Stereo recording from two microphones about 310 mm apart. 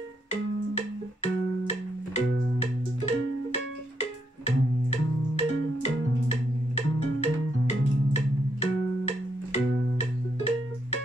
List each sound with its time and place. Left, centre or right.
0.3 s music: centre
4.5 s music: centre